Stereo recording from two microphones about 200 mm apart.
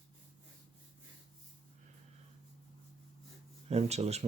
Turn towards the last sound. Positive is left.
turn(degrees=-35)  # may be behind; listen again after turning